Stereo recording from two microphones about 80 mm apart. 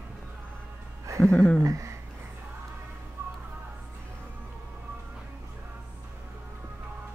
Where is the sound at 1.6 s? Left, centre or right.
Right.